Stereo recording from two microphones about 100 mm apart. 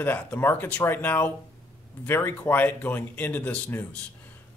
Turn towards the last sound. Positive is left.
turn(degrees=15)  # may be behind; listen again after turning